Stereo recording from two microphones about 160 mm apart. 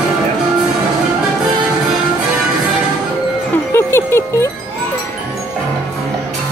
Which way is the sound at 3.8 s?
15° left (ahead or behind).